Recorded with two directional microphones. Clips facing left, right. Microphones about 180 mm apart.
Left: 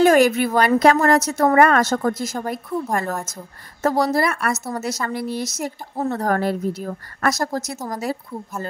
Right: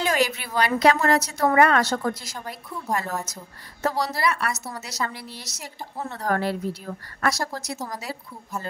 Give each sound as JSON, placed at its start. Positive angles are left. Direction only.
{"t": 0.0, "sound": "a woman's voice", "side_deg": 50}